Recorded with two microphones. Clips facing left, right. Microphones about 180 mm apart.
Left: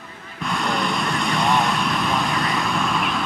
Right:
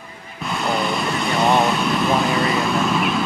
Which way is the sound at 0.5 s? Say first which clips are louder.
Right 2 dB; 5° right (ahead or behind).